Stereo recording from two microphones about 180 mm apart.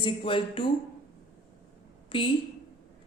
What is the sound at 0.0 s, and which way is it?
Speech, 30° left (ahead or behind).